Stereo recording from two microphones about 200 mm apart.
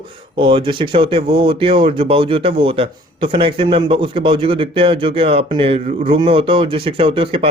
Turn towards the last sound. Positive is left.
turn(degrees=-25)  # may be behind; listen again after turning